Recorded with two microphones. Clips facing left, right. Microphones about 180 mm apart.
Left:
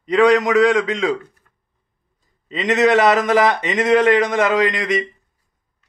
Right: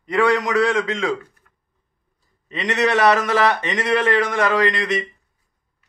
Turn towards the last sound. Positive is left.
turn(degrees=15)  # may be behind; listen again after turning